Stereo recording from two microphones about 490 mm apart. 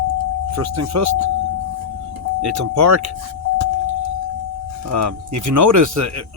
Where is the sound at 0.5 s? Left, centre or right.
Right.